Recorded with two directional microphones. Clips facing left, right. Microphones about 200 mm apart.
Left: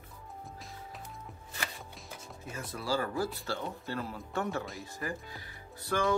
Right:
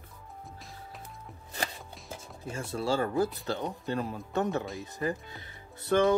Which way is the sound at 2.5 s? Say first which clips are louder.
Right 4 dB; 25° right (ahead or behind).